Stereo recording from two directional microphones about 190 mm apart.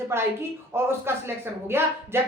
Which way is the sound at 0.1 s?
15° right (ahead or behind).